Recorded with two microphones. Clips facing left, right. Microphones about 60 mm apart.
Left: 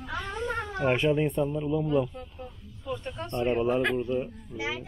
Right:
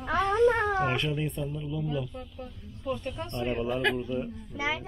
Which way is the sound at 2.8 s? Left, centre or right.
Centre.